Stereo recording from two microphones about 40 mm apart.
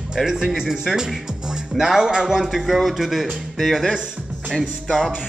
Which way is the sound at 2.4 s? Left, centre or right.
Centre.